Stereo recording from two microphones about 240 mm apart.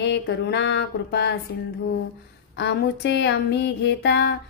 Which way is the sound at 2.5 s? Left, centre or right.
Left.